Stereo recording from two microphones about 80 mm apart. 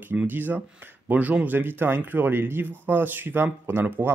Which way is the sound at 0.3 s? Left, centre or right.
Right.